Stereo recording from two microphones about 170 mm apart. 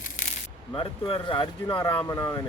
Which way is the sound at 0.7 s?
30° left (ahead or behind).